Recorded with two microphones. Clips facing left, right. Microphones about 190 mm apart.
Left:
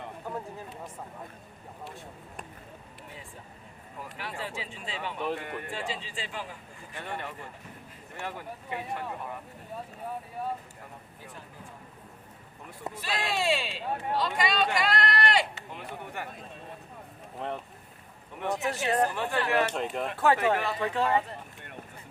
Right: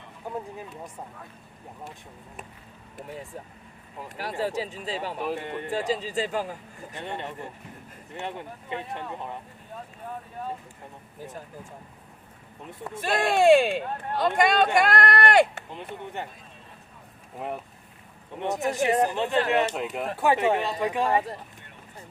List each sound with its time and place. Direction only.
4.2 s speech: 40° right (ahead or behind)
5.4 s speech: 25° right (ahead or behind)
5.7 s speech: 40° right (ahead or behind)
6.9 s speech: 20° right (ahead or behind)
11.3 s speech: 45° right (ahead or behind)
13.0 s speech: 50° right (ahead or behind)
16.2 s speech: 20° right (ahead or behind)
17.4 s speech: 10° right (ahead or behind)
18.3 s speech: 20° right (ahead or behind)
19.7 s speech: 5° right (ahead or behind)
20.1 s speech: 15° right (ahead or behind)